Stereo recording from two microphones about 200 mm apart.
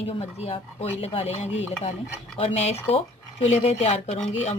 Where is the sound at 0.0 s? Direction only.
30° left (ahead or behind).